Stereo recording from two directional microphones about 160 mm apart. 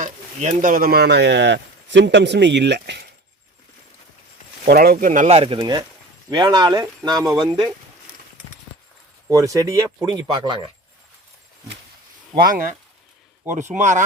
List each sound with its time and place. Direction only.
0.0 s speech: 50° right (ahead or behind); by 3.1 s 90° right
4.6 s speech: 75° right (ahead or behind); by 5.5 s 40° right (ahead or behind)
5.5 s speech: 25° right (ahead or behind)
9.3 s speech: 20° right (ahead or behind)
12.4 s speech: 65° right (ahead or behind)
13.5 s speech: 50° right (ahead or behind)